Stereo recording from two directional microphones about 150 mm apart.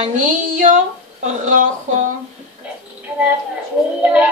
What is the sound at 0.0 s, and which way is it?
A woman's voice, 50° right (ahead or behind).